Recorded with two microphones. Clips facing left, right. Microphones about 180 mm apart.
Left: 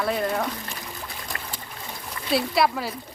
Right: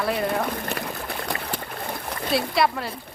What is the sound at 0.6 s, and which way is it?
Trickle, 60° right (ahead or behind).